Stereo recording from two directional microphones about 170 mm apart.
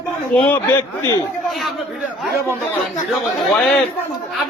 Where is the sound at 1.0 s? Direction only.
20° left (ahead or behind).